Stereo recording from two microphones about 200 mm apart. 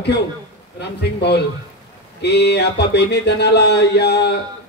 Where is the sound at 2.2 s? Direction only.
55° left (ahead or behind).